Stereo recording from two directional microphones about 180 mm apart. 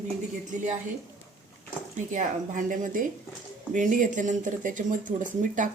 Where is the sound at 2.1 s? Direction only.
45° right (ahead or behind).